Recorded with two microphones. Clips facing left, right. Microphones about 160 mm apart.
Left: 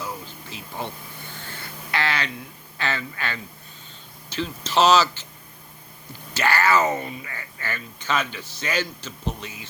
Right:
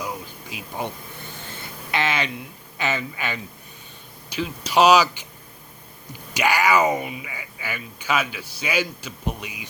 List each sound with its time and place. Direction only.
0.5 s speech: 15° right (ahead or behind)
1.4 s a sound: 20° right (ahead or behind)
2.7 s speech: 15° right (ahead or behind)
6.3 s speech: 15° right (ahead or behind)